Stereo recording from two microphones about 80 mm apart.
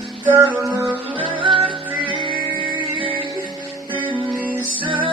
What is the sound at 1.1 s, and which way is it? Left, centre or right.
Music, right.